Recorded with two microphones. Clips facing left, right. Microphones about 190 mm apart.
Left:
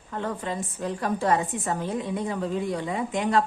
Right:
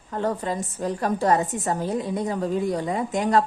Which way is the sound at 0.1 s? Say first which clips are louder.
Right 4 dB; 40° right (ahead or behind).